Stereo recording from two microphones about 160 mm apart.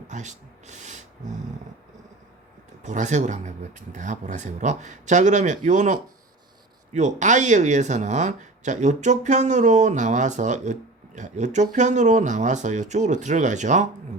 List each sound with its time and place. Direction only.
0.1 s speech: 50° right (ahead or behind)
2.8 s speech: 50° right (ahead or behind)